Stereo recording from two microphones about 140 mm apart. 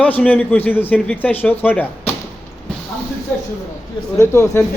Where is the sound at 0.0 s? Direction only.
10° left (ahead or behind).